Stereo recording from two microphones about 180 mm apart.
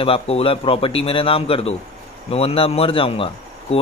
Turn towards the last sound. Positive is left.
turn(degrees=30)  # may be behind; listen again after turning